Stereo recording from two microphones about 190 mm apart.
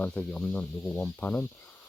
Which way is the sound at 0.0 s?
5° left (ahead or behind).